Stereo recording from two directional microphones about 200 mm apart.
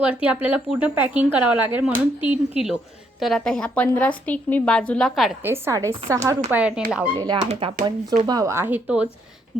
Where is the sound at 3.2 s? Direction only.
Centre (ahead or behind).